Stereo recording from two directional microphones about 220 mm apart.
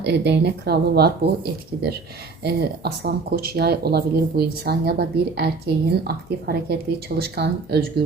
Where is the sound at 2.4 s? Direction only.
45° right (ahead or behind).